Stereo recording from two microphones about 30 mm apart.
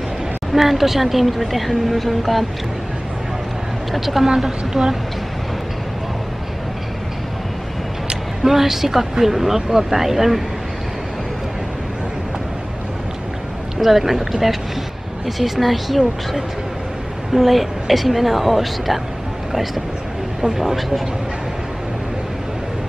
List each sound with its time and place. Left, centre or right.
0.5 s speech: centre
3.9 s speech: centre
4.2 s a woman's voice: centre
8.5 s speech: centre
13.7 s speech: centre
17.3 s speech: centre